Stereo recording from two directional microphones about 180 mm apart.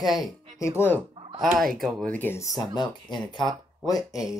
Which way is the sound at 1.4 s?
Centre (ahead or behind).